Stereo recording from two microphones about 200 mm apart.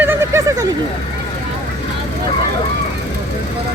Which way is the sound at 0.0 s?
10° right (ahead or behind).